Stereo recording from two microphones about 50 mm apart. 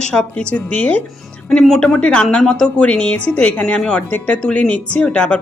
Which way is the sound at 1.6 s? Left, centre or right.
Centre.